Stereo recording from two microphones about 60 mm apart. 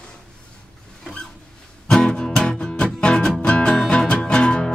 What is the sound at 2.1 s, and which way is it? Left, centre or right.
Music, centre.